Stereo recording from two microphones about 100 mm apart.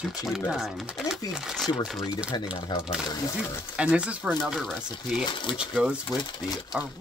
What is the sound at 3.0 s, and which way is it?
Speech, 40° left (ahead or behind).